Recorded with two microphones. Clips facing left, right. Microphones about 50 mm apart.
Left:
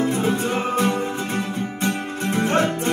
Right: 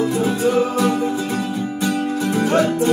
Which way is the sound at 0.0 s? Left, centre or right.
Left.